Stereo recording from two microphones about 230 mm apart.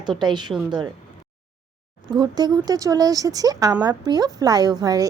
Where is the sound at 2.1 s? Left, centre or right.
Centre.